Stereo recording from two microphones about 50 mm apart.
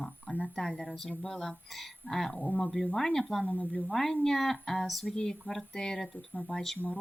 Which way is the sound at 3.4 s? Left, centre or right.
Left.